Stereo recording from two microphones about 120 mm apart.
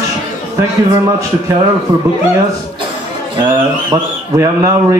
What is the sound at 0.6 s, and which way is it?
Speech, 30° right (ahead or behind).